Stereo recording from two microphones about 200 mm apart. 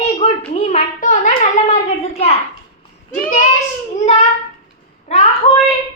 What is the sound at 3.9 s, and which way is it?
A child's voice, 35° left (ahead or behind).